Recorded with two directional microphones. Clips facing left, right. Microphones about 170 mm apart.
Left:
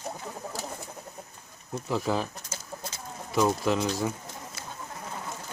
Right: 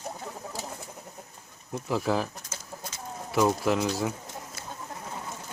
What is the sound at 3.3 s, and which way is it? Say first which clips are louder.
Speech: right 1 dB; 5° right (ahead or behind).